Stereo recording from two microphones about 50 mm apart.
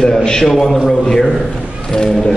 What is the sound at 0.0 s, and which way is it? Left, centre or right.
A man's voice, centre.